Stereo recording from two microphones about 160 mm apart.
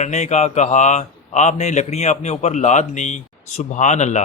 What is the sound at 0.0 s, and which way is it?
A man's voice, 45° left (ahead or behind).